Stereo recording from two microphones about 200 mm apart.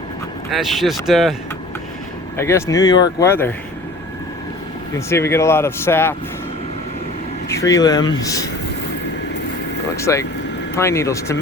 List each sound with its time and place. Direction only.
0.5 s speech: centre (ahead or behind)
2.4 s speech: 15° left (ahead or behind)
4.9 s speech: 15° left (ahead or behind)
7.4 s speech: 15° left (ahead or behind)
9.9 s speech: 15° left (ahead or behind)